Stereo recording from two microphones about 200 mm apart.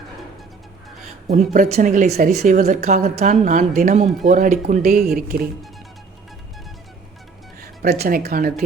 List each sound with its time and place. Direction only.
1.5 s a woman's voice: 40° right (ahead or behind)
2.4 s a woman's voice: 35° right (ahead or behind)
7.6 s speech: 50° right (ahead or behind)